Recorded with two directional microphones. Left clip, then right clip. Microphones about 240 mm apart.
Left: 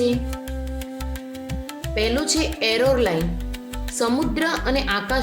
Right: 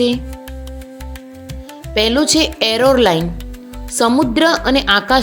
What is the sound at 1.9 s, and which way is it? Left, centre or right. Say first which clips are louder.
A woman's voice: right 8 dB; right.